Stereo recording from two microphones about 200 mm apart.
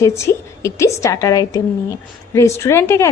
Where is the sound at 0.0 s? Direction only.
15° left (ahead or behind).